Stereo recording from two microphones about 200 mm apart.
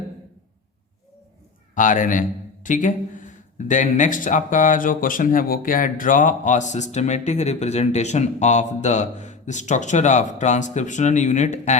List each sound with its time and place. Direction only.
1.7 s speech: 40° left (ahead or behind)